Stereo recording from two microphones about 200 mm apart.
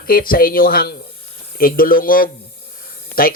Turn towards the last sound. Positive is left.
turn(degrees=45)  # may be behind; listen again after turning